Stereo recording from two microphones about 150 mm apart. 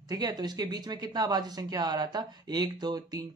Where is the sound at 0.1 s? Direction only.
30° right (ahead or behind).